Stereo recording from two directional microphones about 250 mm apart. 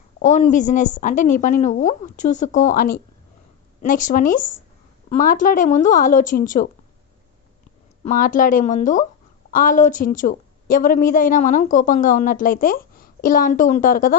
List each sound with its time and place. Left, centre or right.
0.2 s a woman's voice: left
8.0 s a woman's voice: left